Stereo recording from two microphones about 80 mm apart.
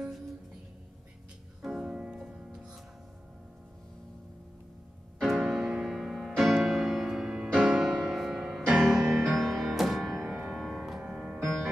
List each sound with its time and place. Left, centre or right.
1.6 s music: centre
5.2 s music: centre